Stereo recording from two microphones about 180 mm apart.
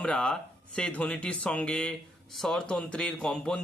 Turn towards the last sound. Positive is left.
turn(degrees=5)  # may be behind; listen again after turning